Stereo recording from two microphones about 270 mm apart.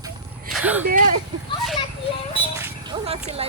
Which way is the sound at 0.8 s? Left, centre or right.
Right.